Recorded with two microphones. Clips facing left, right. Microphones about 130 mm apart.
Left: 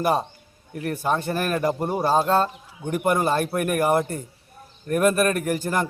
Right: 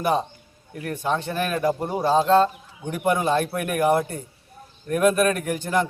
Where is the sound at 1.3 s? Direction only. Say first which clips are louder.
Left 1 dB; 45° left (ahead or behind).